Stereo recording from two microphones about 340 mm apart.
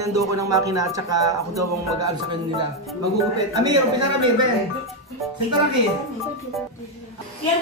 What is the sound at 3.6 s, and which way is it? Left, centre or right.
Speech, right.